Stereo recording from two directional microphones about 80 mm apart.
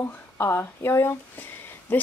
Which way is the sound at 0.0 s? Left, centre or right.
Left.